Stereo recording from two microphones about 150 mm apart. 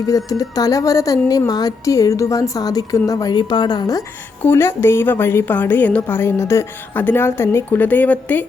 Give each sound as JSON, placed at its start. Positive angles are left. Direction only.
{"t": 0.3, "sound": "a woman's voice", "side_deg": 25}
{"t": 4.4, "sound": "a woman's voice", "side_deg": 15}